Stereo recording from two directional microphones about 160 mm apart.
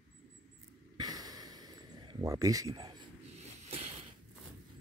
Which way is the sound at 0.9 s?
25° right (ahead or behind).